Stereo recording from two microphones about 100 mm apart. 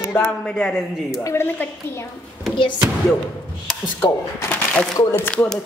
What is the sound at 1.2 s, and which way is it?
Speech, 25° left (ahead or behind).